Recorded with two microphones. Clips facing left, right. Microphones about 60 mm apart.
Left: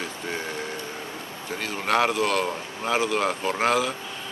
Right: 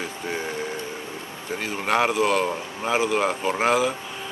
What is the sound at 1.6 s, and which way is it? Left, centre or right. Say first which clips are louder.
A man's voice: right 1 dB; centre.